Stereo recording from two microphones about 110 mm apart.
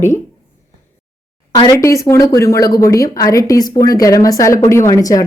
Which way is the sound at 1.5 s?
35° left (ahead or behind).